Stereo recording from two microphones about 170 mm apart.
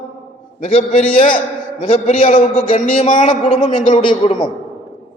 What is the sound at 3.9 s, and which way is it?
Speech, 30° left (ahead or behind).